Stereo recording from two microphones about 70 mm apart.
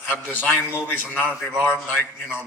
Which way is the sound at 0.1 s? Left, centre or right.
Left.